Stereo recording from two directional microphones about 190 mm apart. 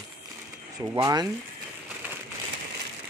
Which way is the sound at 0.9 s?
20° right (ahead or behind).